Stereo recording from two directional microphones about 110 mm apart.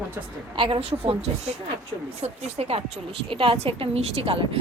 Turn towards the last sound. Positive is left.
turn(degrees=-55)  # may be behind; listen again after turning